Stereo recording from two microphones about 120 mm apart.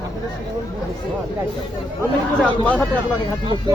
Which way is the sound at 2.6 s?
10° left (ahead or behind).